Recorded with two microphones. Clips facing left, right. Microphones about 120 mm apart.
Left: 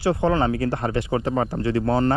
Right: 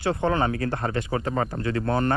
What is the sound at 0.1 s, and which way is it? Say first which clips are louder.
Speech: left 3 dB; 20° left (ahead or behind).